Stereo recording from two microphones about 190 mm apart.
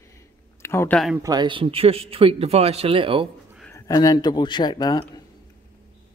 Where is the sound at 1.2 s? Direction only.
20° right (ahead or behind).